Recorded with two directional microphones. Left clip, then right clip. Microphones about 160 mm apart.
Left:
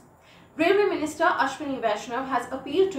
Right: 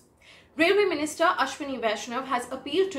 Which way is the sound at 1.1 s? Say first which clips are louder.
Left 1 dB; 15° right (ahead or behind).